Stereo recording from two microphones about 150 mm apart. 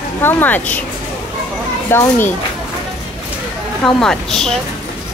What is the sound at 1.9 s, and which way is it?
Speech, 15° left (ahead or behind).